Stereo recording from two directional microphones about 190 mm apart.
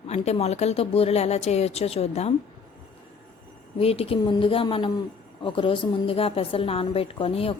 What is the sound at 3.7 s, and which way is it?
A woman's voice, 30° left (ahead or behind).